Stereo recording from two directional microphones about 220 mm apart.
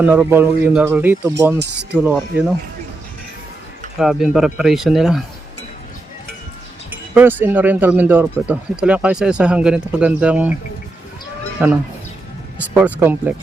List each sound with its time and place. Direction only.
0.0 s speech: 10° right (ahead or behind)
1.5 s speech: 50° right (ahead or behind)
1.9 s speech: 5° right (ahead or behind)
3.9 s speech: centre (ahead or behind)
6.9 s speech: 10° right (ahead or behind)
11.6 s speech: 5° right (ahead or behind)